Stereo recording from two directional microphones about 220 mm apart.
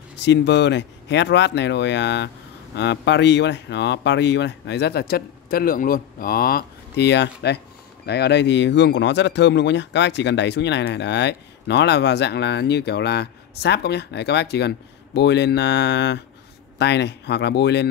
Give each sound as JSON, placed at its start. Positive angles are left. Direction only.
{"t": 0.2, "sound": "speech", "side_deg": 50}